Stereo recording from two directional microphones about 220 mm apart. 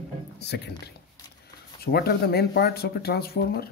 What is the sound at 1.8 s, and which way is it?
Speech, 45° left (ahead or behind).